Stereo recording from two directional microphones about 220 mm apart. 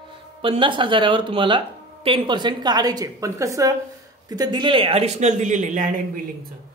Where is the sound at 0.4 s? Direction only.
20° right (ahead or behind).